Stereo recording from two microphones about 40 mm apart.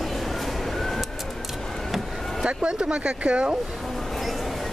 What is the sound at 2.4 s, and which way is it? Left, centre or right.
Speech, right.